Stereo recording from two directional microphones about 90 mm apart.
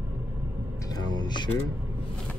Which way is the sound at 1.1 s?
55° left (ahead or behind).